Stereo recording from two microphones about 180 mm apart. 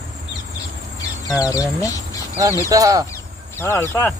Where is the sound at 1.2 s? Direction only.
20° left (ahead or behind).